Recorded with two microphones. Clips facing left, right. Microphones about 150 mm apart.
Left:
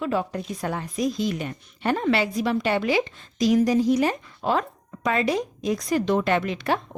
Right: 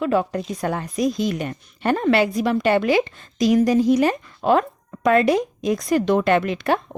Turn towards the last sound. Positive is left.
turn(degrees=-55)  # may be behind; listen again after turning